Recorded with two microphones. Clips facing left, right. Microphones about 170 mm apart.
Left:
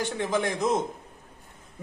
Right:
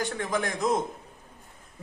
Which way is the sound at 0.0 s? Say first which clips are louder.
Left 2 dB; 25° left (ahead or behind).